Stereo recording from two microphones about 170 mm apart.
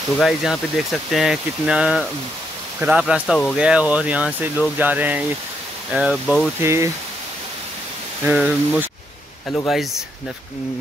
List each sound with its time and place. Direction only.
0.2 s speech: centre (ahead or behind)
6.6 s speech: 15° right (ahead or behind)
8.3 s speech: 10° right (ahead or behind)